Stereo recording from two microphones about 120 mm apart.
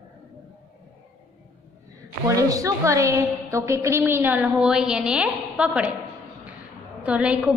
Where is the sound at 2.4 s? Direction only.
30° right (ahead or behind); by 5.9 s 10° right (ahead or behind).